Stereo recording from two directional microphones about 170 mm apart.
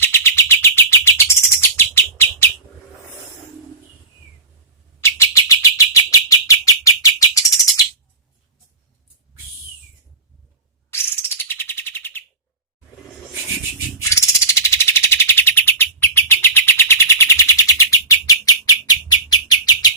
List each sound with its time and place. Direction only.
0.0 s bird: 15° left (ahead or behind)
4.9 s bird: 15° left (ahead or behind)
10.9 s bird: 15° left (ahead or behind)
14.0 s a sound: 15° left (ahead or behind)
19.5 s chirp: 25° left (ahead or behind)